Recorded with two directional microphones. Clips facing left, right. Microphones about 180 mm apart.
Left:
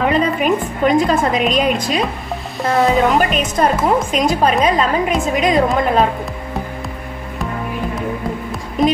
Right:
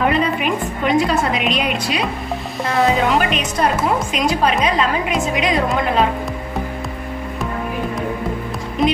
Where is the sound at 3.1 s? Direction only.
45° left (ahead or behind).